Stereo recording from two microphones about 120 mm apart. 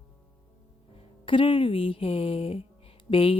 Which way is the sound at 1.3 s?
45° left (ahead or behind).